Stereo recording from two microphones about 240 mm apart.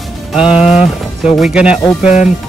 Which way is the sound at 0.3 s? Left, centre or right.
Centre.